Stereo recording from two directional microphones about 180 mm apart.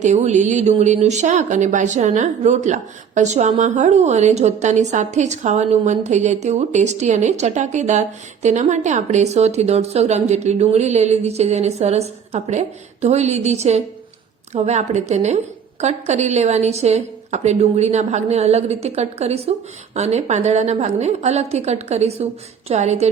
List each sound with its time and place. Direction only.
0.0 s speech: 40° right (ahead or behind)